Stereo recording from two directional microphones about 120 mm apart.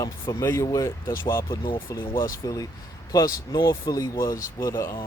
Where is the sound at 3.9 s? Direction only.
30° left (ahead or behind).